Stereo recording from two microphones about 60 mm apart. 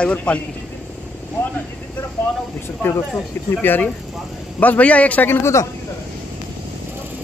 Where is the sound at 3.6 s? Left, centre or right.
Left.